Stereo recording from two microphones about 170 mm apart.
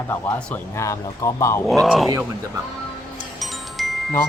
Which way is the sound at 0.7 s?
15° left (ahead or behind).